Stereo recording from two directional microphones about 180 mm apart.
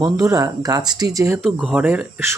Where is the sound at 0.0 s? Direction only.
20° right (ahead or behind).